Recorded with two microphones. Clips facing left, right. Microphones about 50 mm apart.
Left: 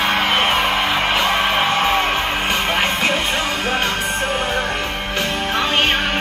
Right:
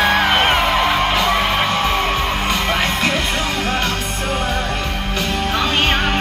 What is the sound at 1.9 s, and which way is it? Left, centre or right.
Music, left.